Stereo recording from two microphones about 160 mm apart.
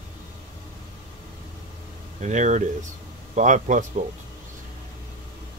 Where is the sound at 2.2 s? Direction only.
45° right (ahead or behind).